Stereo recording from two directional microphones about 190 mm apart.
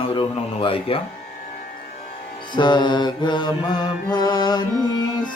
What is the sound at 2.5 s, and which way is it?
Mantra, 25° left (ahead or behind).